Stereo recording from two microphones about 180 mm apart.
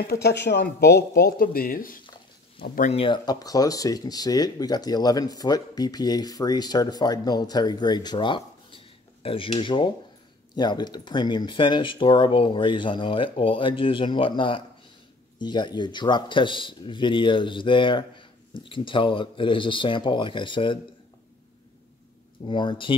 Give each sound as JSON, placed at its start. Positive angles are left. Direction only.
{"t": 0.1, "sound": "speech", "side_deg": 70}
{"t": 2.9, "sound": "speech", "side_deg": 30}
{"t": 22.5, "sound": "speech", "side_deg": 25}